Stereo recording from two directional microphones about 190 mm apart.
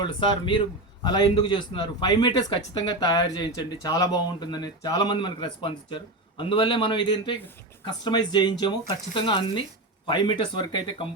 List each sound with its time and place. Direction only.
0.0 s speech: 25° left (ahead or behind)